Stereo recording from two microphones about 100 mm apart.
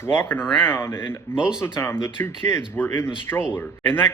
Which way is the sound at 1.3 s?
10° right (ahead or behind).